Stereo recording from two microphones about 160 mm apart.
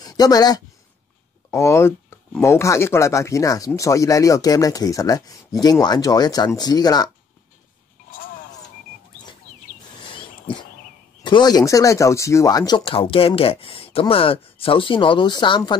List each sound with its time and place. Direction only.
0.0 s speech: 25° left (ahead or behind)
11.2 s speech: 25° left (ahead or behind)